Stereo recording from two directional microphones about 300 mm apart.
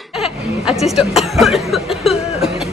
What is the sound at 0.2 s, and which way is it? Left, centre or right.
Speech, centre.